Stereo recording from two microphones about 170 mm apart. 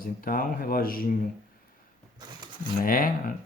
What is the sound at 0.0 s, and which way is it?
Speech, 55° left (ahead or behind).